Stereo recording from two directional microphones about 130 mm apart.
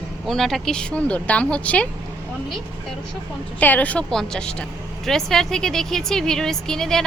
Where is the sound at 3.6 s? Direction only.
15° left (ahead or behind).